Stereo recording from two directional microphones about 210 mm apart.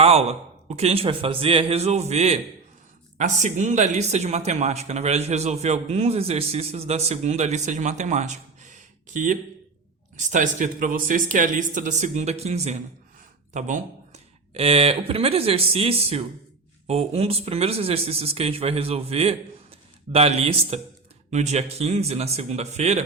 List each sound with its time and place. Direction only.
0.0 s speech: 30° right (ahead or behind)